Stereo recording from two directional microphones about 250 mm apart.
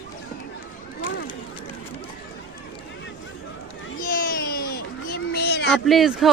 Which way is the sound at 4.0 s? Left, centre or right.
Left.